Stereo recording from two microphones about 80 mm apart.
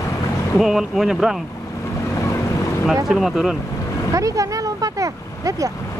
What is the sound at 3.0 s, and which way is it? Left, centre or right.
Speech, centre.